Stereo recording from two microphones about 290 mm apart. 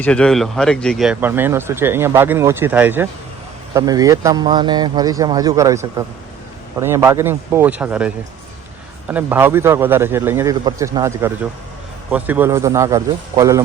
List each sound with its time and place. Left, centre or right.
0.0 s speech: centre